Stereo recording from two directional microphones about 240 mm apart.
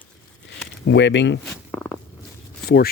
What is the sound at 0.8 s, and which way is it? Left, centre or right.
Speech, left.